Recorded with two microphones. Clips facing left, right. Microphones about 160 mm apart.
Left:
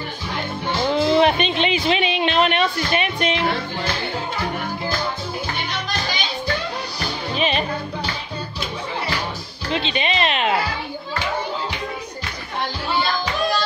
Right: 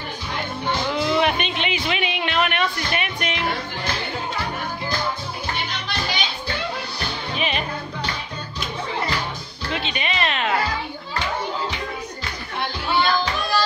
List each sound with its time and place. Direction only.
0.9 s speech: 30° left (ahead or behind)
7.3 s music: 30° left (ahead or behind)
9.7 s music: 25° left (ahead or behind)